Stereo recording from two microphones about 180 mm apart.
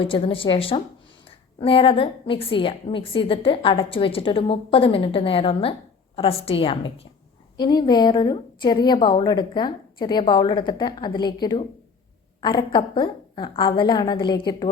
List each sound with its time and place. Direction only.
0.0 s a woman's voice: 30° left (ahead or behind)